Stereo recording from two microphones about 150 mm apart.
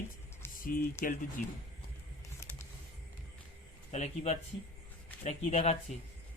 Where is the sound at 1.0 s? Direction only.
70° left (ahead or behind).